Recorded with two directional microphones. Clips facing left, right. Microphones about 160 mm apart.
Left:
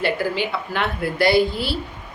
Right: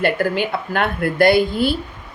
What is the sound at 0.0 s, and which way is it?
Speech, 50° right (ahead or behind).